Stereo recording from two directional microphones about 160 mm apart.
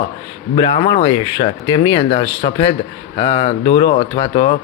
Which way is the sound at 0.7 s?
25° left (ahead or behind).